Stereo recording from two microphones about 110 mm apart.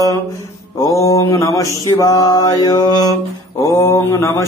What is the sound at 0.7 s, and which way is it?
Mantra, 30° left (ahead or behind).